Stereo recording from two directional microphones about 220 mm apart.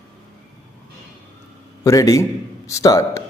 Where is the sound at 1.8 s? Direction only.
15° left (ahead or behind).